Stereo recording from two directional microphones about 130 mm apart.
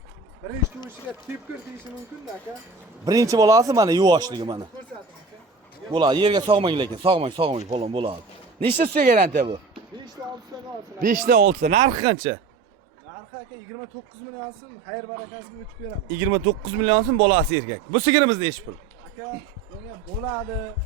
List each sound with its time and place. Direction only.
3.0 s speech: 30° right (ahead or behind)
5.9 s speech: 35° right (ahead or behind)
9.0 s speech: 80° right
10.5 s speech: 25° right (ahead or behind)
11.0 s speech: 90° right
11.8 s speech: 35° right (ahead or behind)
16.1 s speech: 40° right (ahead or behind)